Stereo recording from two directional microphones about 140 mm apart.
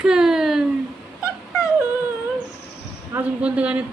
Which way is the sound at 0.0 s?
5° right (ahead or behind).